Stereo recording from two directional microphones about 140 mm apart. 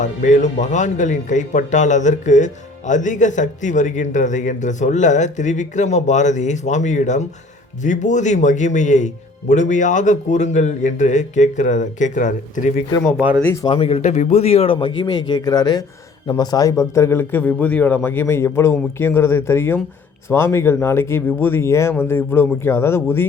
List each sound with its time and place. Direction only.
0.0 s speech: 60° left (ahead or behind)
13.1 s speech: 10° right (ahead or behind)
13.4 s speech: 20° left (ahead or behind)
13.7 s a man's voice: 45° left (ahead or behind); by 23.2 s 15° left (ahead or behind)